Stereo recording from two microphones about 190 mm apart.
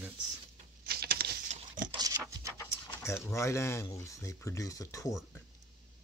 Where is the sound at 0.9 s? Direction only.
55° right (ahead or behind).